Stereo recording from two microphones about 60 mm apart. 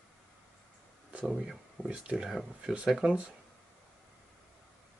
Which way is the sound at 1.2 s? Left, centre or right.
Centre.